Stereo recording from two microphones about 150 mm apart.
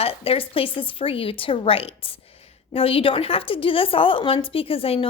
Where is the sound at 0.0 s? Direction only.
40° left (ahead or behind).